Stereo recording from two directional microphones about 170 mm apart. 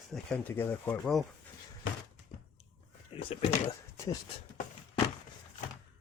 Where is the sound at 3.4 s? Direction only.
40° left (ahead or behind).